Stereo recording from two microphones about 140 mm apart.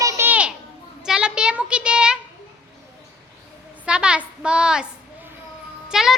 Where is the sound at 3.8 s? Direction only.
5° right (ahead or behind).